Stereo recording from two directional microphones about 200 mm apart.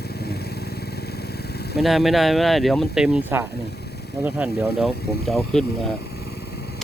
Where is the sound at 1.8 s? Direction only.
Centre (ahead or behind).